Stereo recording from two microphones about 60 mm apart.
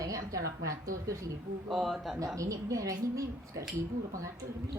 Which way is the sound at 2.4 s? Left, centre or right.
Right.